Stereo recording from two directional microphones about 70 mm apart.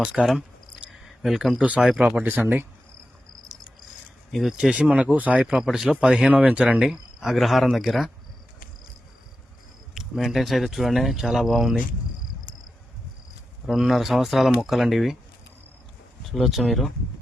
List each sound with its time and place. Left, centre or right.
0.0 s speech: centre
2.2 s speech: right
4.3 s speech: centre
4.5 s speech: centre
5.6 s speech: centre
9.9 s speech: centre
13.7 s speech: centre
16.2 s speech: centre